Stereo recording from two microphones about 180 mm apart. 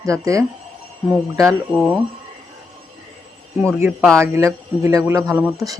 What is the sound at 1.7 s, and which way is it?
Speech, centre (ahead or behind).